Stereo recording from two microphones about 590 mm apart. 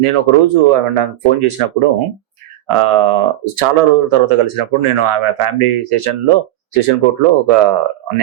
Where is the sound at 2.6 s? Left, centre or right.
Right.